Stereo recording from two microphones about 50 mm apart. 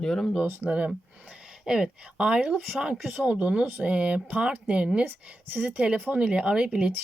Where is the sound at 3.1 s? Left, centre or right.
Right.